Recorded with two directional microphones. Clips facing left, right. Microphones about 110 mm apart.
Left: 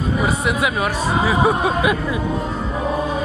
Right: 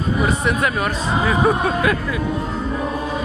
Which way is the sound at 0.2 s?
Centre (ahead or behind).